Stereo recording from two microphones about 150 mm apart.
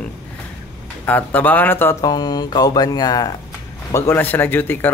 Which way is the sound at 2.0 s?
25° left (ahead or behind).